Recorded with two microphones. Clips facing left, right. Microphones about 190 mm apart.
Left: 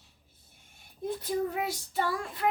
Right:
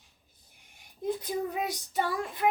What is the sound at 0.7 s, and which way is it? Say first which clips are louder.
Child singing: right 2 dB; 15° right (ahead or behind).